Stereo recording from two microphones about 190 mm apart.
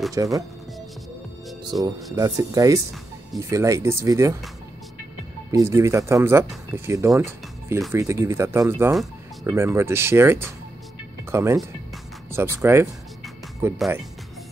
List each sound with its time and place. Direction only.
0.1 s speech: 15° right (ahead or behind)
1.6 s music: 20° right (ahead or behind)
2.1 s speech: 20° right (ahead or behind)
5.5 s speech: 15° right (ahead or behind)